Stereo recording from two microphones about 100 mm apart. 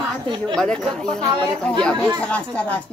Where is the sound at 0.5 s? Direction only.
10° left (ahead or behind).